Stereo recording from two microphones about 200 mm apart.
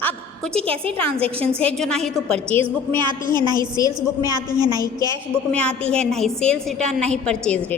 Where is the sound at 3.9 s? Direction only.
20° right (ahead or behind).